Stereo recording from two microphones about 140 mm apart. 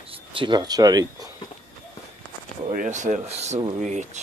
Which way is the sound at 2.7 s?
65° right (ahead or behind).